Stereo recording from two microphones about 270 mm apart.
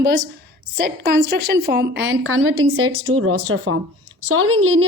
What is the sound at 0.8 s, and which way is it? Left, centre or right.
Speech, right.